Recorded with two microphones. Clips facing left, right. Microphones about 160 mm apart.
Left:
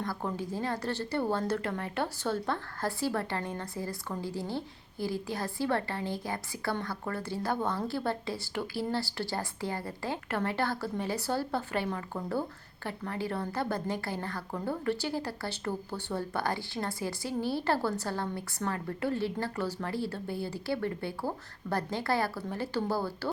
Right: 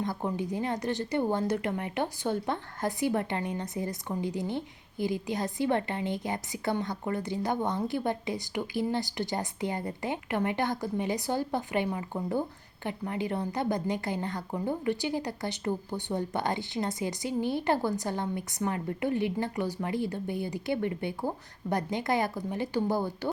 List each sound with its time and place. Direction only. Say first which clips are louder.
0.0 s a woman's voice: right 3 dB; 20° right (ahead or behind)